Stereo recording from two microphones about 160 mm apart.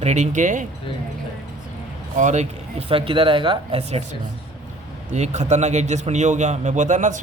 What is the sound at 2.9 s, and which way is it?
A man's voice, 35° right (ahead or behind).